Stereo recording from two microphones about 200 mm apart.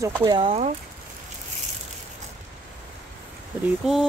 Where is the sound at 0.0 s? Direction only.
20° right (ahead or behind).